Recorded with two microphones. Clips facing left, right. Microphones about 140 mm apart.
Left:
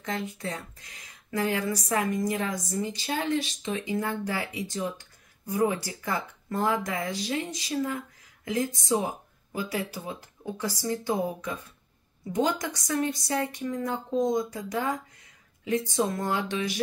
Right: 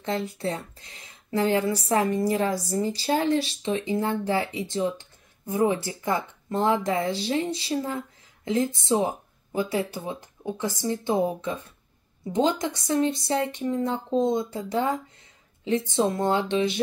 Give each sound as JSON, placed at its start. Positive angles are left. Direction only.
{"t": 0.0, "sound": "speech", "side_deg": -35}